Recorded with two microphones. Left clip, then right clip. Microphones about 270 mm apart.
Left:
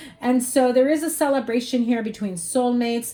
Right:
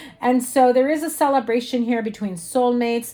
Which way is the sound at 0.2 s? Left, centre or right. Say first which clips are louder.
Right 3 dB; right.